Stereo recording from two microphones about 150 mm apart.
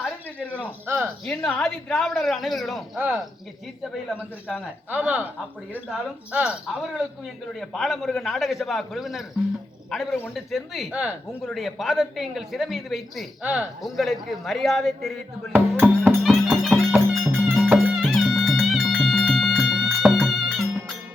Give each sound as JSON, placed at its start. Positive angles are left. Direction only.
{"t": 0.0, "sound": "a sound", "side_deg": 10}
{"t": 0.6, "sound": "speech", "side_deg": -10}
{"t": 1.2, "sound": "speech", "side_deg": 5}
{"t": 4.5, "sound": "speech", "side_deg": -10}
{"t": 15.5, "sound": "music", "side_deg": -15}
{"t": 16.2, "sound": "music", "side_deg": 0}